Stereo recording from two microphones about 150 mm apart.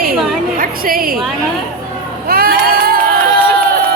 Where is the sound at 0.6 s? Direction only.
70° right (ahead or behind).